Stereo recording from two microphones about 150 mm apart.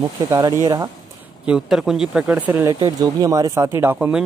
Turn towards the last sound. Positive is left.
turn(degrees=-10)  # may be behind; listen again after turning